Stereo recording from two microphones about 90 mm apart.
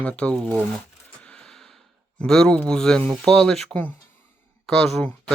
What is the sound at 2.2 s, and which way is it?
Speech, 5° left (ahead or behind).